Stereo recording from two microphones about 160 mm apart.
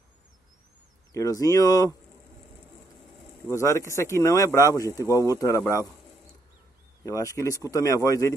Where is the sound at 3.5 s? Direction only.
20° left (ahead or behind).